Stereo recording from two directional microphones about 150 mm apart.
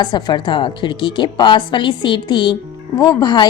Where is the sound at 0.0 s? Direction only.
30° left (ahead or behind).